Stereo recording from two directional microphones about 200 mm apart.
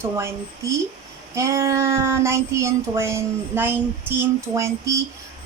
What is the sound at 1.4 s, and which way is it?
Child singing, 15° right (ahead or behind).